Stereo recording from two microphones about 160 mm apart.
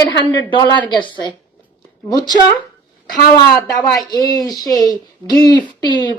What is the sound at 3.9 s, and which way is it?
A woman's voice, 25° left (ahead or behind).